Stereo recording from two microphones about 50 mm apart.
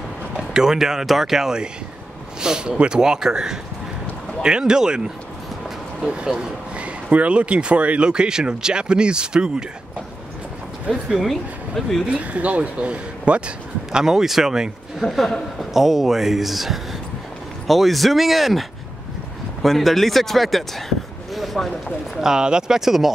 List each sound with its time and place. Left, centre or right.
0.4 s speech: centre
11.1 s speech: centre
12.1 s speech: right
13.9 s speech: centre
15.0 s speech: centre
15.7 s speech: centre
21.3 s a sound: centre
22.2 s speech: centre